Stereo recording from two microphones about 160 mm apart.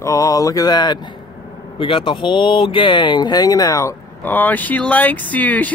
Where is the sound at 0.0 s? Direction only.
20° left (ahead or behind).